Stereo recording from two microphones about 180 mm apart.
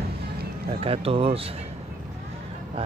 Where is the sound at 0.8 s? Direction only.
30° right (ahead or behind).